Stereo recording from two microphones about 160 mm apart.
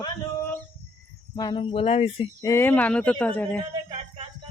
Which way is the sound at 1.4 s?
30° left (ahead or behind).